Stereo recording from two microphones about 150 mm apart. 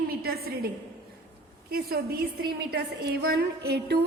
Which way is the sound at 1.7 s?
90° right.